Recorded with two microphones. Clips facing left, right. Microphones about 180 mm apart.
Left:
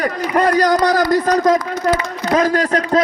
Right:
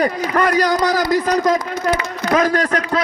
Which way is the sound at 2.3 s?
35° left (ahead or behind).